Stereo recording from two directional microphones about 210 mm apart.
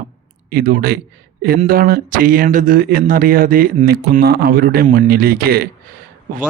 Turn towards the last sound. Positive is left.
turn(degrees=-45)  # may be behind; listen again after turning